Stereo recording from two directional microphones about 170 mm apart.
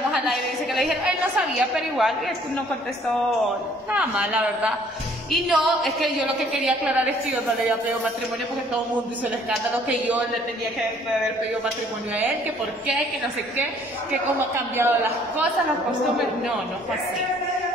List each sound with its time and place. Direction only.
0.1 s a woman's voice: centre (ahead or behind)
3.9 s a man's voice: 10° right (ahead or behind)
9.5 s a man's voice: 10° right (ahead or behind)
14.8 s a man's voice: 15° right (ahead or behind)